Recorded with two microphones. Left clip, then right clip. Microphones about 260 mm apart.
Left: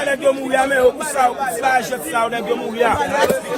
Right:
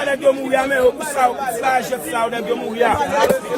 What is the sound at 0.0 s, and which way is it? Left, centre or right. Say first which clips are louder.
A man's voice: right 1 dB; right.